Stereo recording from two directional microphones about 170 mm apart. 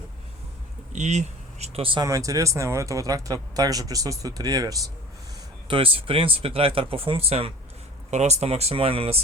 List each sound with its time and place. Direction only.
0.9 s speech: 40° right (ahead or behind)
2.0 s speech: 20° right (ahead or behind); by 9.2 s 35° right (ahead or behind)